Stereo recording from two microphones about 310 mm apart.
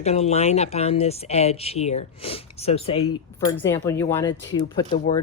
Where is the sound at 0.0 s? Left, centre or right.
Centre.